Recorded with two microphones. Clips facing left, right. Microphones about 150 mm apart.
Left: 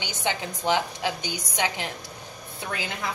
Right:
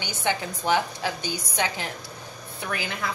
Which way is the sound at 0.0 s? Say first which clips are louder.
Right 2 dB; 20° left (ahead or behind).